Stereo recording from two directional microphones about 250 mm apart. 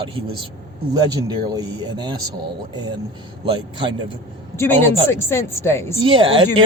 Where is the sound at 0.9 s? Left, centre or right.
Centre.